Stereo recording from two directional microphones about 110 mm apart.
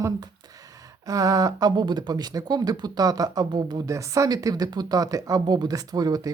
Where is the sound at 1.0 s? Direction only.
35° right (ahead or behind).